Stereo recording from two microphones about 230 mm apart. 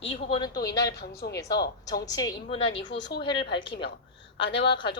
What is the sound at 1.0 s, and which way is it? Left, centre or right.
Speech, left.